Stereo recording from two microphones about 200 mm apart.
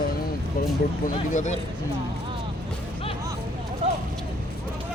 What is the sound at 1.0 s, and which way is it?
Speech, 40° left (ahead or behind).